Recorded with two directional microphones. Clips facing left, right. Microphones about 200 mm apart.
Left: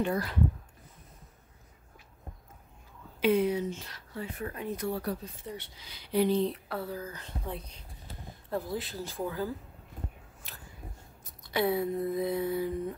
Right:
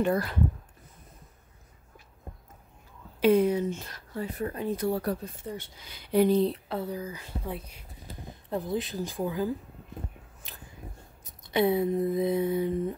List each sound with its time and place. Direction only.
0.0 s speech: 50° right (ahead or behind)
3.2 s speech: 45° right (ahead or behind)
5.0 s speech: 50° right (ahead or behind)
6.4 s speech: 25° right (ahead or behind); by 7.8 s 10° right (ahead or behind)
8.5 s speech: 20° right (ahead or behind)
11.4 s a sound: 20° right (ahead or behind)